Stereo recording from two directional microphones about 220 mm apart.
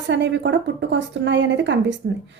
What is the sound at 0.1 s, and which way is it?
A woman's voice, 55° right (ahead or behind).